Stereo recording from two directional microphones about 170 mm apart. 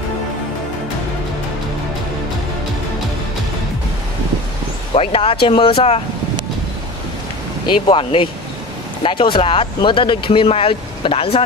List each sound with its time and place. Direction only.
4.9 s speech: 35° left (ahead or behind)
7.6 s speech: 30° left (ahead or behind)